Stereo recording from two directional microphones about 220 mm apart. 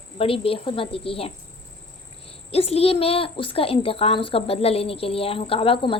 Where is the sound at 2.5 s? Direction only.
25° left (ahead or behind).